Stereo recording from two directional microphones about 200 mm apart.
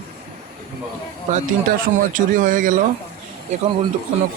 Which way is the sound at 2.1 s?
40° right (ahead or behind).